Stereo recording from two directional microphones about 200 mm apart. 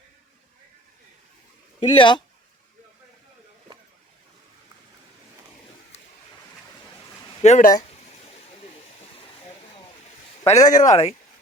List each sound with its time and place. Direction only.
1.8 s speech: 25° left (ahead or behind)
7.4 s speech: 35° left (ahead or behind)
10.4 s speech: 35° left (ahead or behind)